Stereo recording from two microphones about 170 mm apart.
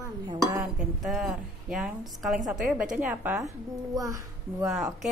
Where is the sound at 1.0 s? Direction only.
Centre (ahead or behind); by 4.7 s 20° right (ahead or behind).